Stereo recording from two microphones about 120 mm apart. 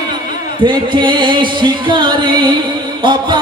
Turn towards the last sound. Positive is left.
turn(degrees=-40)  # may be behind; listen again after turning